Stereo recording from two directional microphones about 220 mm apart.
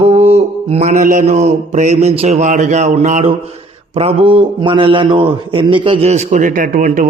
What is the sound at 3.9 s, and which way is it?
A man's voice, 25° right (ahead or behind).